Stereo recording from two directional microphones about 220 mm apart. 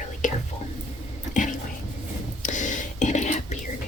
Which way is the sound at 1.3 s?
35° left (ahead or behind).